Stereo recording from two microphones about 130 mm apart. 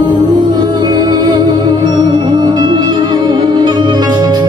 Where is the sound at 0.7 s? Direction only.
35° right (ahead or behind).